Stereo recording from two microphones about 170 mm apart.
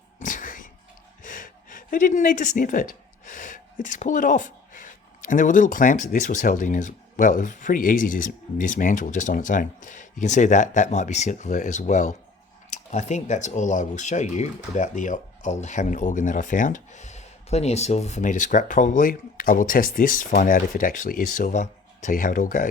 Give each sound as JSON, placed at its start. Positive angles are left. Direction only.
{"t": 0.2, "sound": "music", "side_deg": 50}
{"t": 1.2, "sound": "gasp", "side_deg": 50}
{"t": 5.3, "sound": "speech", "side_deg": 50}